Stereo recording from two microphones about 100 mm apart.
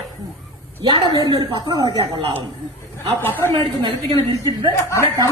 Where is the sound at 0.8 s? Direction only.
50° right (ahead or behind).